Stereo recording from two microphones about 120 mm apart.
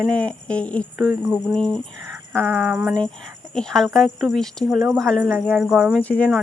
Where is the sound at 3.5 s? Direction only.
5° left (ahead or behind).